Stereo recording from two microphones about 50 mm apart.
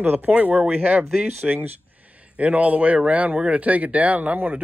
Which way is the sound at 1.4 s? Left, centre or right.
Centre.